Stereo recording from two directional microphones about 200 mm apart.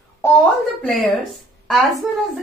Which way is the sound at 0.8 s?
Centre (ahead or behind).